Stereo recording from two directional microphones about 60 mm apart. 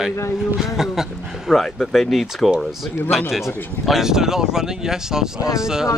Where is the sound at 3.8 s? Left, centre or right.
Centre.